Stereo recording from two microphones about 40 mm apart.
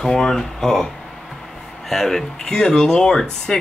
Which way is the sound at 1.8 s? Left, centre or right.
Centre.